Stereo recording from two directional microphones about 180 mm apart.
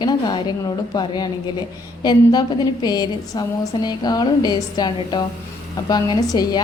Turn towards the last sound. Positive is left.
turn(degrees=20)  # may be behind; listen again after turning